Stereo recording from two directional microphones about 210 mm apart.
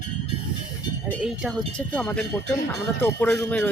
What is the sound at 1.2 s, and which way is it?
Speech, centre (ahead or behind).